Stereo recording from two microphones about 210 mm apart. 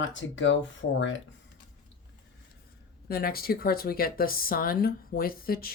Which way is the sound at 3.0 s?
45° left (ahead or behind).